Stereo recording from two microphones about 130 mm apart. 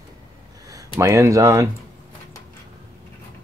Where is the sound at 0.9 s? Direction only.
25° right (ahead or behind).